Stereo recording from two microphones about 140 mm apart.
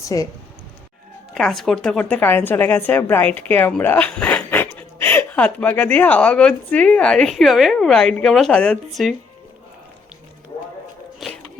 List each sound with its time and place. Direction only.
0.0 s speech: 25° left (ahead or behind)
1.3 s a woman's voice: centre (ahead or behind)
11.2 s music: centre (ahead or behind)